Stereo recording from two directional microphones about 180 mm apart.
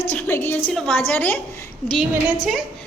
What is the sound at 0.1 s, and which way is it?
A woman's voice, 10° left (ahead or behind).